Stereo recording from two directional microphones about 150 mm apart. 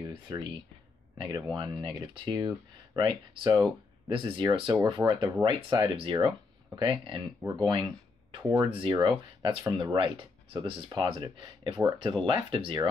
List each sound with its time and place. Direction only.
0.1 s speech: 30° right (ahead or behind)